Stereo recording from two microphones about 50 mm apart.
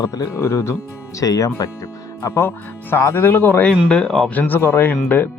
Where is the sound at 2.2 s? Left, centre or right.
Left.